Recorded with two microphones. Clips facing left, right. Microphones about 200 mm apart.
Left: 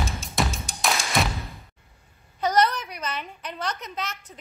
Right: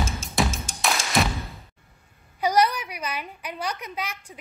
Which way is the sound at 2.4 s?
10° right (ahead or behind).